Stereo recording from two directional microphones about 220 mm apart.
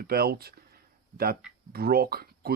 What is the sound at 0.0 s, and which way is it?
Speech, 45° right (ahead or behind).